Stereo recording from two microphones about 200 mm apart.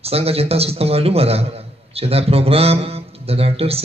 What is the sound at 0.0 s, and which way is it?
A man's voice, 30° right (ahead or behind).